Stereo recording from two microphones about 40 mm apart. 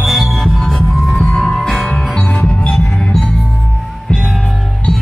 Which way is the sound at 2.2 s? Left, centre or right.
Left.